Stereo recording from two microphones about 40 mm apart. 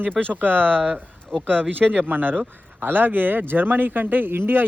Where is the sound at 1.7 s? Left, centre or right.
Right.